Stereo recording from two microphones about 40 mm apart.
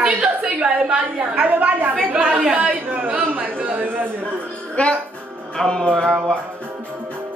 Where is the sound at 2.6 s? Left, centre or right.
Right.